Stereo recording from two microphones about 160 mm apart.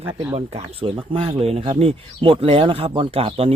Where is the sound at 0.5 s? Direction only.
35° right (ahead or behind).